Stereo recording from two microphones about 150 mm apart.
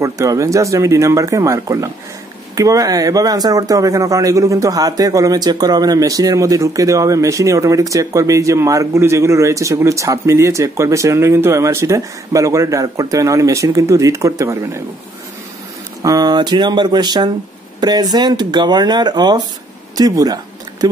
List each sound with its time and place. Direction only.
0.0 s speech: 20° right (ahead or behind)
16.0 s speech: 25° right (ahead or behind)